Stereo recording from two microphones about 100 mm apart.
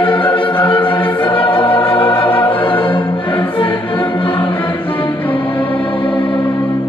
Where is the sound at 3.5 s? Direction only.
60° left (ahead or behind).